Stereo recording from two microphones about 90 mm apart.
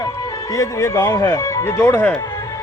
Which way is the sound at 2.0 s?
20° left (ahead or behind).